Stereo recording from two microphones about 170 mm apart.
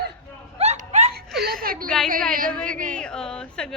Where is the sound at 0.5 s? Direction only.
40° right (ahead or behind).